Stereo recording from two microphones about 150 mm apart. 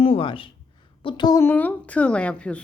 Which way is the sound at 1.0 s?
30° left (ahead or behind).